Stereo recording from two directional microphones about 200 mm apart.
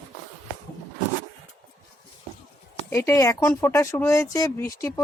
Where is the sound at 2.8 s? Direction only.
10° left (ahead or behind).